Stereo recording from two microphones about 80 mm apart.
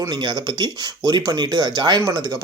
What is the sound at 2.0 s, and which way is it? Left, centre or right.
Speech, right.